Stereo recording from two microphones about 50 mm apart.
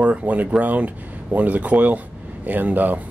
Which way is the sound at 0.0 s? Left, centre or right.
Right.